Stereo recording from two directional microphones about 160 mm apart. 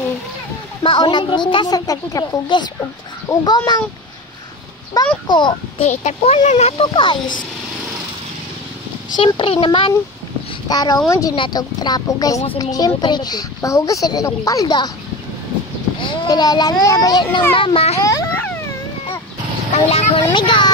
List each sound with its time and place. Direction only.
0.8 s speech: 30° left (ahead or behind)
5.2 s speech: 30° left (ahead or behind)
5.9 s speech: 45° left (ahead or behind)
6.8 s speech: 30° left (ahead or behind)
9.2 s speech: 35° left (ahead or behind)
10.7 s speech: 25° left (ahead or behind)
16.0 s a child's voice: 25° left (ahead or behind)
17.9 s a sound: 20° left (ahead or behind)
19.7 s speech: 40° left (ahead or behind)